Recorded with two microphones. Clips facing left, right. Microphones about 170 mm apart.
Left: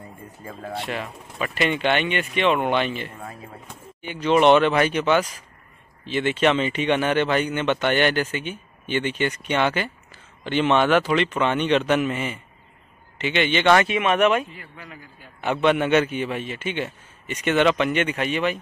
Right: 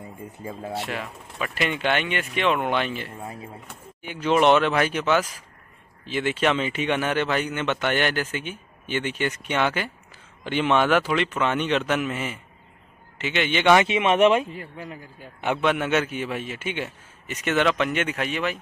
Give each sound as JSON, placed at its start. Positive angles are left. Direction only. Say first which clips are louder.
{"t": 0.0, "sound": "speech", "louder": "right 3 dB", "side_deg": -15}
{"t": 0.7, "sound": "a man's voice", "louder": "left 1 dB", "side_deg": -5}
{"t": 13.8, "sound": "speech", "louder": "right 1 dB", "side_deg": -25}
{"t": 14.5, "sound": "a man's voice", "louder": "right 6 dB", "side_deg": -40}
{"t": 15.4, "sound": "a man's voice", "louder": "left 3 dB", "side_deg": -5}